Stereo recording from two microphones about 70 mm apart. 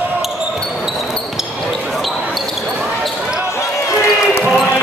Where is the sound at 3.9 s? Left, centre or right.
Left.